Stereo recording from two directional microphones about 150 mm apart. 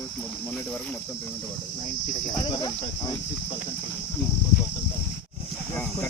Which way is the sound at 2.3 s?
30° left (ahead or behind).